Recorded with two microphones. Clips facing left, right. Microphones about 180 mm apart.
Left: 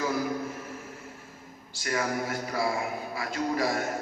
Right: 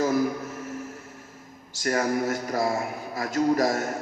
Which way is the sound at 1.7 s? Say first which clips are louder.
Right 5 dB; 45° right (ahead or behind).